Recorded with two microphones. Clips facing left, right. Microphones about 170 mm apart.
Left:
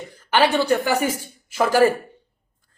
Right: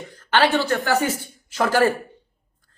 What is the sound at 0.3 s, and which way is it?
A woman's voice, 10° left (ahead or behind).